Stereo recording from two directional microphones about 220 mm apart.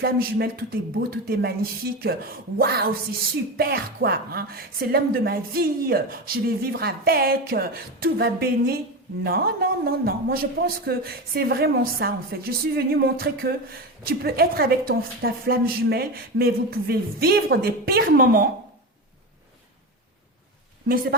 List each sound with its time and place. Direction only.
0.0 s a man's voice: 45° right (ahead or behind)
20.8 s a woman's voice: 40° right (ahead or behind)